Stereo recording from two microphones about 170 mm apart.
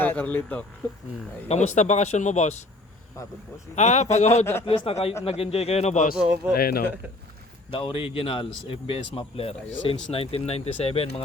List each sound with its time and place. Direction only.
0.0 s speech: 10° left (ahead or behind)
1.5 s speech: 40° left (ahead or behind)
3.2 s speech: 20° left (ahead or behind)
3.8 s speech: 40° left (ahead or behind)
4.6 s speech: 30° left (ahead or behind); by 6.1 s 45° left (ahead or behind)
6.1 s speech: 5° right (ahead or behind)
6.5 s speech: 65° left (ahead or behind)
7.7 s speech: 30° left (ahead or behind)